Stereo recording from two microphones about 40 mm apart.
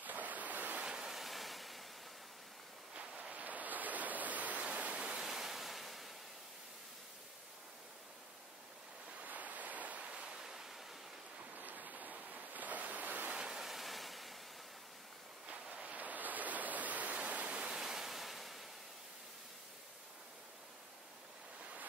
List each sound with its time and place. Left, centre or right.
0.0 s waves: right
0.7 s waterfall: centre
2.9 s a sound: right
3.4 s a sound: right
5.1 s ocean: centre
9.2 s waves: right; by 10.8 s centre
11.5 s ocean: right
13.3 s waves: centre
13.7 s waves: centre
15.7 s a sound: right
17.3 s waterfall: right
17.6 s waterfall: centre